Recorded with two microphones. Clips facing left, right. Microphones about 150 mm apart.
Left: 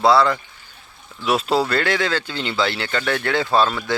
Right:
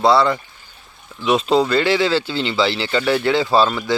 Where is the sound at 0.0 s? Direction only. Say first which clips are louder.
Right 1 dB; centre (ahead or behind).